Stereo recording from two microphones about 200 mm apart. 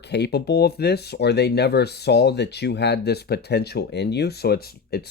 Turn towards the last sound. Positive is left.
turn(degrees=50)  # may be behind; listen again after turning